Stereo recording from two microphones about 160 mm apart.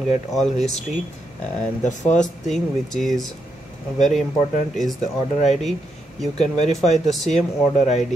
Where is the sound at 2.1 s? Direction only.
Centre (ahead or behind).